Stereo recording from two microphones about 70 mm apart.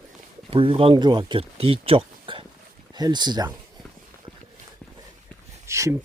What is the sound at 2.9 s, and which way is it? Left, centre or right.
Speech, right.